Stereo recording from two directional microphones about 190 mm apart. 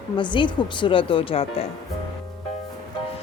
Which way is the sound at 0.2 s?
25° left (ahead or behind).